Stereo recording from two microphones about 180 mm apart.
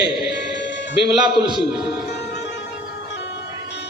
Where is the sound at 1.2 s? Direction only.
25° right (ahead or behind).